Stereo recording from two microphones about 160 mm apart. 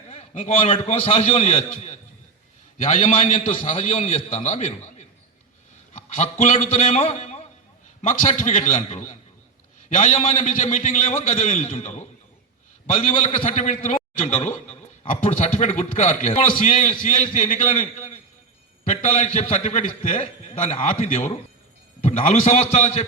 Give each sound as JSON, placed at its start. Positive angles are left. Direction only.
{"t": 0.1, "sound": "a man's voice", "side_deg": 45}
{"t": 5.9, "sound": "a man's voice", "side_deg": 45}